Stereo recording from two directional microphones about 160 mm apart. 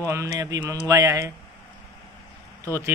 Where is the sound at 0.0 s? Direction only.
20° right (ahead or behind).